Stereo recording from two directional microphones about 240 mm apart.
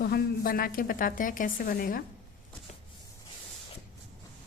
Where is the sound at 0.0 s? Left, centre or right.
Left.